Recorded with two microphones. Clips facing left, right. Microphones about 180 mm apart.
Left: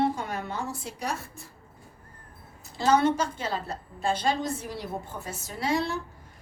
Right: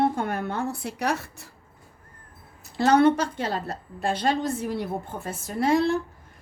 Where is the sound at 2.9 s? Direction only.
60° right (ahead or behind).